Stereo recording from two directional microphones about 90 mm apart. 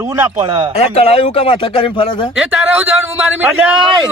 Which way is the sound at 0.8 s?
90° left.